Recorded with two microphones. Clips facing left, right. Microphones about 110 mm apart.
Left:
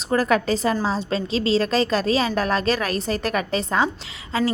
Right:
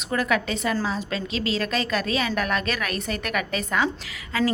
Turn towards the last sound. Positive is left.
turn(degrees=25)  # may be behind; listen again after turning